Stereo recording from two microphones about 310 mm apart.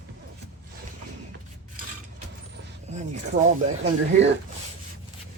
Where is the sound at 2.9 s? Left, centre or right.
Right.